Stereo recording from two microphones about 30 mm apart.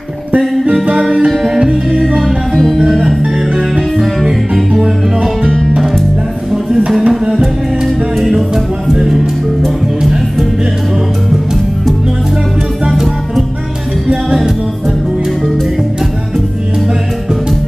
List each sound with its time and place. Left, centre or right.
1.5 s music: right
3.9 s music: centre
7.1 s music: centre
8.3 s music: centre